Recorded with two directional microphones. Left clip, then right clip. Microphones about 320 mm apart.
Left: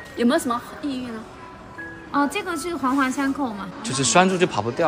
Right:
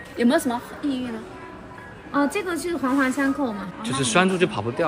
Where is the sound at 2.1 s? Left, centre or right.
Centre.